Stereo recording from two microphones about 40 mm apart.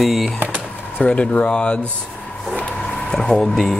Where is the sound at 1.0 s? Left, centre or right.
Left.